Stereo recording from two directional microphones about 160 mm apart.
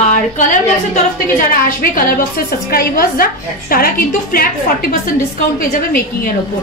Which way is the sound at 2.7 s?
65° left (ahead or behind).